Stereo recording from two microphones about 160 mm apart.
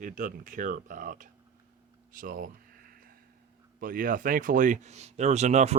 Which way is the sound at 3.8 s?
60° right (ahead or behind).